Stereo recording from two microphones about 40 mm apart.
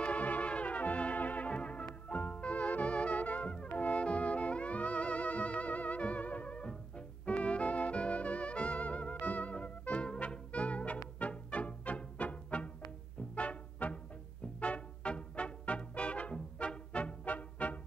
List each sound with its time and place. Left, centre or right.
0.0 s brass instrument: left
1.5 s music: left